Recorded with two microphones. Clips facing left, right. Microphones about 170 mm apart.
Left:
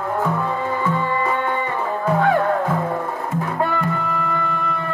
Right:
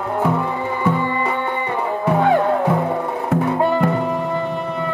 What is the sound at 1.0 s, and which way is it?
Music, 20° right (ahead or behind).